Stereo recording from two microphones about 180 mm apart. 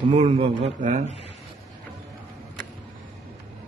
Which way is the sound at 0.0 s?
30° right (ahead or behind).